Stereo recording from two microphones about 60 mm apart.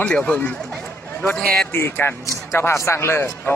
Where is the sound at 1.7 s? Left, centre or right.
Left.